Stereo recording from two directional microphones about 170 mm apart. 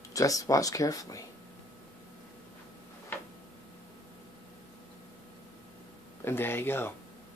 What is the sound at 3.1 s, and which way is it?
Tick-tock, 10° left (ahead or behind).